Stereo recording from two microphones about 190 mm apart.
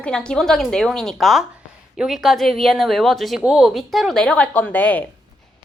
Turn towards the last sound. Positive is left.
turn(degrees=10)  # may be behind; listen again after turning